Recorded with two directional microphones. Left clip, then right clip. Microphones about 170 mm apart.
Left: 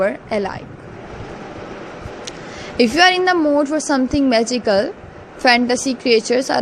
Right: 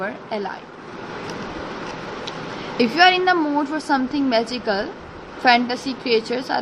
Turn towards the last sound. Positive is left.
turn(degrees=45)  # may be behind; listen again after turning